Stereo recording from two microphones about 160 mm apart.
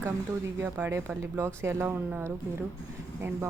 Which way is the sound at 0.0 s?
15° right (ahead or behind).